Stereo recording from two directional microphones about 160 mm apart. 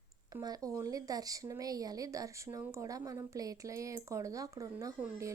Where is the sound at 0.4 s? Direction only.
20° right (ahead or behind).